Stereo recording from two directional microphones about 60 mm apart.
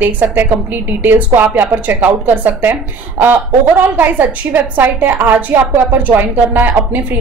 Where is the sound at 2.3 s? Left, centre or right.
Right.